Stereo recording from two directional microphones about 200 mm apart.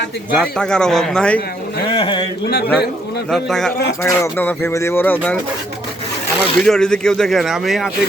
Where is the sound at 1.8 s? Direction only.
25° left (ahead or behind).